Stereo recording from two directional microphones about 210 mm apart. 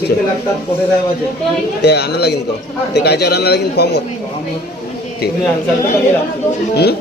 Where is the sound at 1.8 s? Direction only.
50° left (ahead or behind).